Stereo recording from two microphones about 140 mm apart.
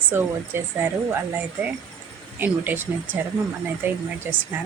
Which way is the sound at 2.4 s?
10° right (ahead or behind).